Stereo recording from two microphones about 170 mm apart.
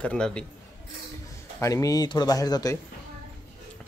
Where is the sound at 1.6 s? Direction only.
20° left (ahead or behind).